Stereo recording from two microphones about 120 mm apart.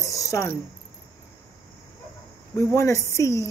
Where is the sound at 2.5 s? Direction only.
25° left (ahead or behind).